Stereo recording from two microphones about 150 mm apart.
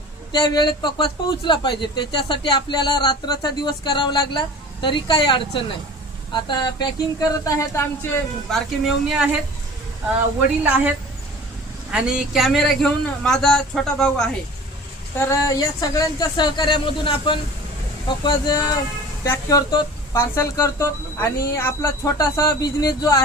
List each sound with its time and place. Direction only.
0.3 s speech: 30° left (ahead or behind)
8.4 s a man's voice: centre (ahead or behind)
10.6 s a woman's voice: 10° right (ahead or behind)
15.2 s speech: 20° left (ahead or behind)